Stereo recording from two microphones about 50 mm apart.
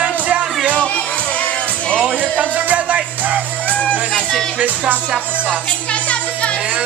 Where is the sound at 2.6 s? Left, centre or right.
Right.